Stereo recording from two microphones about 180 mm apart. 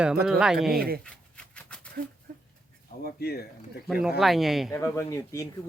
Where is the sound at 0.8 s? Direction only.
60° right (ahead or behind).